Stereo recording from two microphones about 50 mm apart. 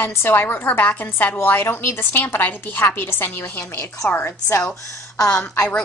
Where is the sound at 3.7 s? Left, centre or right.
Left.